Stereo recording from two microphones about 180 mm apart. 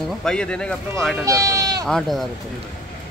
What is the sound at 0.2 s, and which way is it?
Speech, 5° left (ahead or behind).